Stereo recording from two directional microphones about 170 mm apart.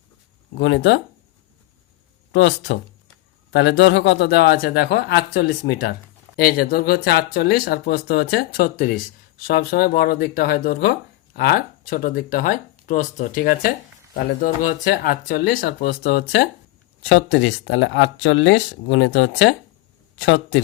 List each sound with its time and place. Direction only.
0.5 s speech: 85° left
2.3 s a man's voice: 90° left; by 16.5 s 70° left (ahead or behind)
17.1 s speech: 90° left